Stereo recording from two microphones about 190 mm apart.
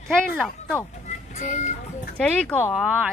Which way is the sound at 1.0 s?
35° left (ahead or behind).